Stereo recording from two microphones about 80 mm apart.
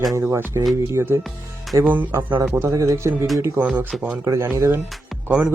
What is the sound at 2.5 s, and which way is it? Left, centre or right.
Speech, right.